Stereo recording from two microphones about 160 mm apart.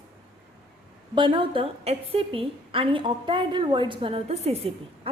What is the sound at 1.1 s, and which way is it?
A woman's voice, 30° right (ahead or behind).